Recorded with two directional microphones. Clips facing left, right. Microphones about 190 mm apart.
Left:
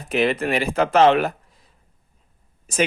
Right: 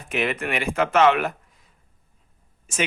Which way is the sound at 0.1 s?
35° left (ahead or behind).